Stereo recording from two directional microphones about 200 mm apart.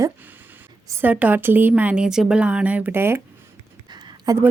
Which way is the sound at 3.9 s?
20° right (ahead or behind).